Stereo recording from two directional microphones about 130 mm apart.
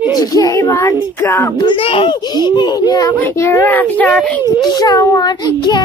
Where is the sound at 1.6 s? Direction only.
40° left (ahead or behind).